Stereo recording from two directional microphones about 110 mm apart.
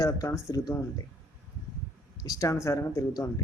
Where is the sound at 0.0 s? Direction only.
30° left (ahead or behind).